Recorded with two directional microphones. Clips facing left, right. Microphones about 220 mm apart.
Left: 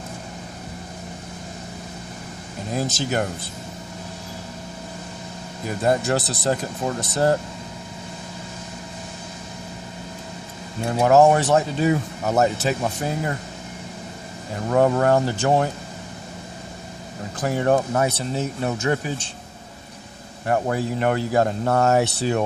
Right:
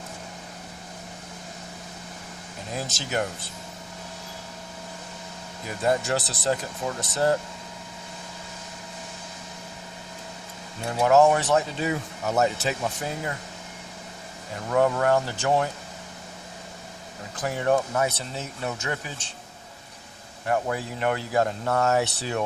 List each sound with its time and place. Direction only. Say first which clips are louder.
2.7 s speech: left 5 dB; 45° left (ahead or behind)
5.6 s speech: left 4 dB; 40° left (ahead or behind)
10.9 s speech: left 3 dB; 40° left (ahead or behind)
14.7 s speech: left 4 dB; 40° left (ahead or behind)
17.4 s speech: left 4 dB; 40° left (ahead or behind)
18.8 s speech: left 9 dB; 35° left (ahead or behind)
20.5 s speech: left 4 dB; 40° left (ahead or behind)